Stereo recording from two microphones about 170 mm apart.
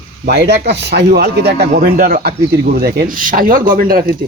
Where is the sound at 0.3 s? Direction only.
75° right (ahead or behind).